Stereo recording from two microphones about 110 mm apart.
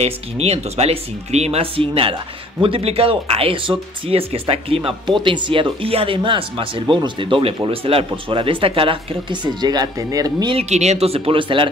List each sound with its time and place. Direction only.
0.0 s speech: 70° right (ahead or behind); by 10.5 s 35° right (ahead or behind)
10.6 s speech: 90° right; by 11.7 s 50° right (ahead or behind)